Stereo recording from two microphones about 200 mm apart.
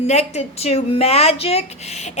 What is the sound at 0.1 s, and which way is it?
Speech, 30° left (ahead or behind).